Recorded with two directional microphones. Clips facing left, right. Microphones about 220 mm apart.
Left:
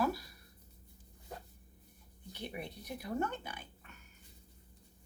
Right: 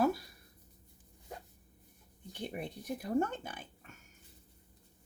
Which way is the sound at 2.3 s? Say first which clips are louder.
Right 3 dB; 50° right (ahead or behind).